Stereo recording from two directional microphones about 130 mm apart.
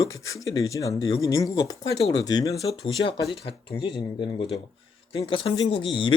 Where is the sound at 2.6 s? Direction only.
40° left (ahead or behind).